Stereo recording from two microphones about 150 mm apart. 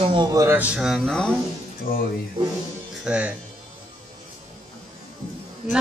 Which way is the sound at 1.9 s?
75° left (ahead or behind).